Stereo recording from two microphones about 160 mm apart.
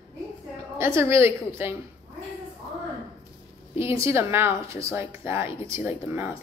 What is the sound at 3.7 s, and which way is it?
A woman's voice, 15° right (ahead or behind).